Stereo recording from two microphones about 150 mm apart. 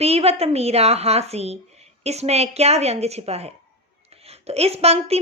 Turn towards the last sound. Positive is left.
turn(degrees=-45)  # may be behind; listen again after turning